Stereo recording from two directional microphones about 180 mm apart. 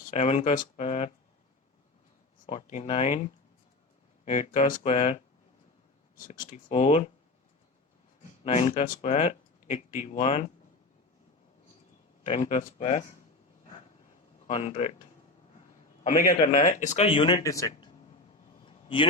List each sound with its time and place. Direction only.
0.1 s speech: 40° left (ahead or behind)
2.5 s speech: 40° left (ahead or behind)
4.3 s speech: 40° left (ahead or behind)
6.1 s speech: 45° left (ahead or behind)
8.4 s speech: 35° left (ahead or behind)
12.2 s speech: 35° left (ahead or behind)
14.4 s speech: 35° left (ahead or behind)
16.6 s speech: 45° left (ahead or behind); by 17.9 s 20° left (ahead or behind)
18.6 s a sound: 30° left (ahead or behind)